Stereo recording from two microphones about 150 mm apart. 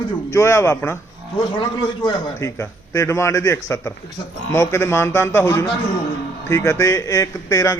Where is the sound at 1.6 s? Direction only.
30° left (ahead or behind).